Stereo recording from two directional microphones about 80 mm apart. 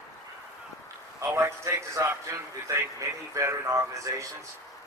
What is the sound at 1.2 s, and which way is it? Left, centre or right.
A man's voice, right.